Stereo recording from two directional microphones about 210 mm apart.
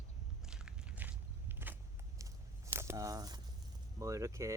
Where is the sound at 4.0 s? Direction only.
15° right (ahead or behind).